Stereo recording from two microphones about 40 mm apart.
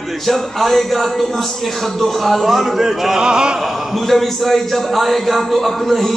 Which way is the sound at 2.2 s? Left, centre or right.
Centre.